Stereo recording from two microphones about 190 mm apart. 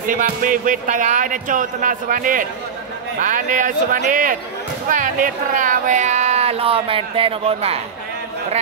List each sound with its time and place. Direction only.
0.0 s speech: 45° right (ahead or behind)